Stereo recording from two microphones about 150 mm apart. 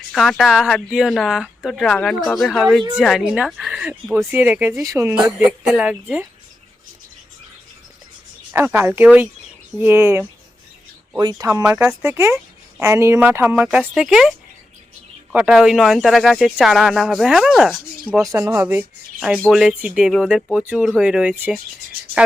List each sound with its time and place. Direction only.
0.1 s speech: centre (ahead or behind); by 5.1 s 20° right (ahead or behind)
5.1 s speech: 5° right (ahead or behind)
8.5 s speech: 15° right (ahead or behind)
11.2 s speech: 25° right (ahead or behind); by 18.3 s 5° right (ahead or behind)
18.3 s speech: 20° right (ahead or behind)
19.5 s speech: 5° right (ahead or behind)